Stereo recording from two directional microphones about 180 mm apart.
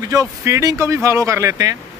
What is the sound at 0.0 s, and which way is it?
Speech, 20° right (ahead or behind).